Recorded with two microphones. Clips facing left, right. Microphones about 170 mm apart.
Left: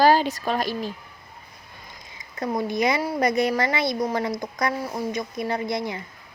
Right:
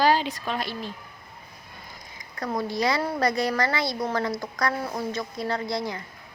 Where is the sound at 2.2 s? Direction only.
20° left (ahead or behind).